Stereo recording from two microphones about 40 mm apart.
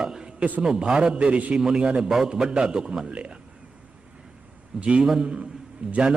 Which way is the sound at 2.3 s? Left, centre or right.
Right.